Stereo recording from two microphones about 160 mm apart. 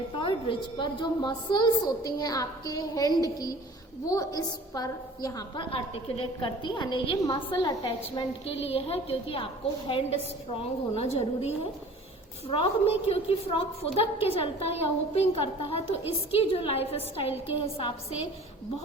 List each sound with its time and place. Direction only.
0.2 s a woman's voice: 30° left (ahead or behind)
5.7 s a woman's voice: 40° left (ahead or behind)